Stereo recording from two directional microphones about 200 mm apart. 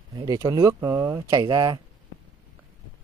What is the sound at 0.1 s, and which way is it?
Speech, 20° right (ahead or behind).